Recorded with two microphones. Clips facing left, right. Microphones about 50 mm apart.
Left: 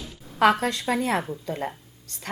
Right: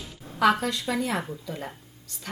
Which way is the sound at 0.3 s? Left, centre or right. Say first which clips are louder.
Left 2 dB; left.